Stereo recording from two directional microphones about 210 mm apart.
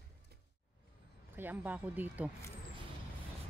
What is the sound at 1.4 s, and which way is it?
Speech, 10° right (ahead or behind).